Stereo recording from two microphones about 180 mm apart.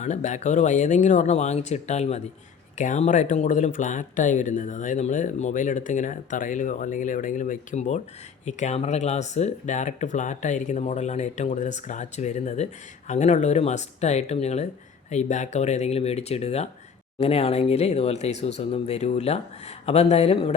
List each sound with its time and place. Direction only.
0.0 s speech: 40° left (ahead or behind)